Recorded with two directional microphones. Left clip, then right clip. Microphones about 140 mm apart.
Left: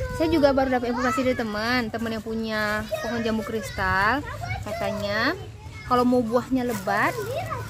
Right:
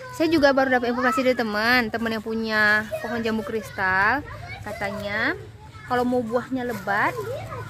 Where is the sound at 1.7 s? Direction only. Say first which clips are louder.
Right 4 dB; 90° right.